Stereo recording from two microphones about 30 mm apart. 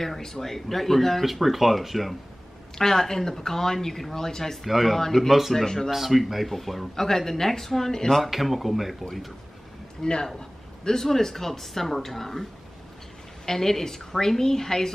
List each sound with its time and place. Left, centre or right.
0.0 s speech: centre
1.2 s speech: centre
2.8 s speech: centre
4.6 s speech: centre
7.0 s speech: centre
8.2 s speech: centre
10.0 s speech: centre
13.5 s speech: centre